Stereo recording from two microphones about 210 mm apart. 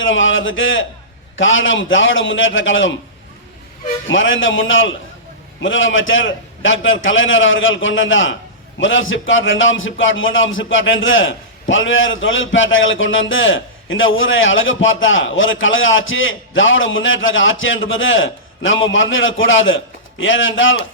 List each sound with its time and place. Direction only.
0.0 s a man's voice: 65° left (ahead or behind)
4.0 s a man's voice: 65° left (ahead or behind)